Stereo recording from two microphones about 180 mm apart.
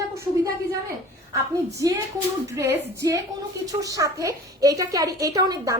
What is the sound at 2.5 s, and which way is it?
A woman's voice, 15° right (ahead or behind).